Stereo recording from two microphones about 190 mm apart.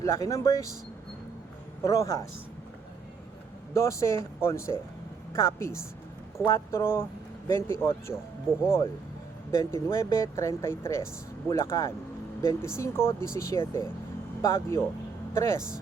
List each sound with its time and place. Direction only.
0.0 s speech: 15° left (ahead or behind)
1.8 s speech: 15° left (ahead or behind)
3.8 s speech: 15° left (ahead or behind)